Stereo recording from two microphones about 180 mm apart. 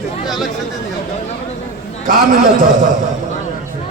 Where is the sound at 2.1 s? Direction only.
50° right (ahead or behind).